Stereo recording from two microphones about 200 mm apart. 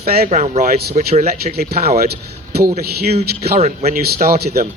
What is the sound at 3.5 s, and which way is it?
Speech, 35° right (ahead or behind).